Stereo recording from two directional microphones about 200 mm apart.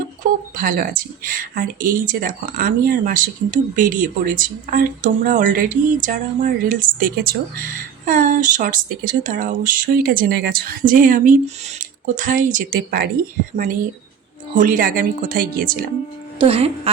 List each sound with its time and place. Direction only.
0.2 s speech: 45° right (ahead or behind)
14.5 s speech: 40° right (ahead or behind)
16.4 s speech: 30° right (ahead or behind)